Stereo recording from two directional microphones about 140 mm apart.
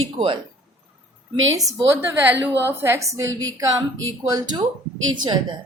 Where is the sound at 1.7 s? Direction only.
15° right (ahead or behind).